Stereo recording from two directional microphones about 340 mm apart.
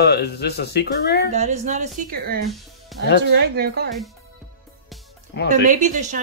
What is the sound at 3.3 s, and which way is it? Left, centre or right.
Speech, right.